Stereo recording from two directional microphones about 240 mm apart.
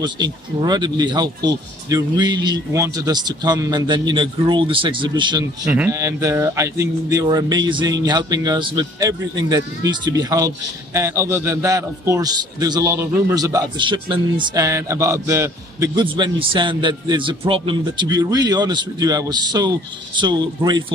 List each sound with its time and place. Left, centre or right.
0.0 s speech: centre